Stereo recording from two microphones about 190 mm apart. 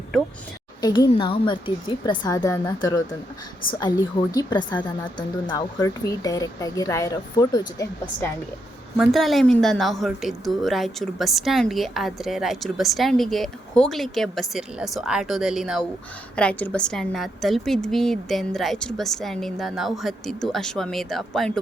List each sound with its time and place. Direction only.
0.1 s a woman's voice: centre (ahead or behind)
0.8 s speech: 20° left (ahead or behind)
3.8 s speech: 20° left (ahead or behind)
9.0 s a woman's voice: centre (ahead or behind)